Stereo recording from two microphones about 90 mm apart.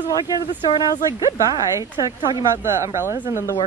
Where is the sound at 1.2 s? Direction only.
40° right (ahead or behind).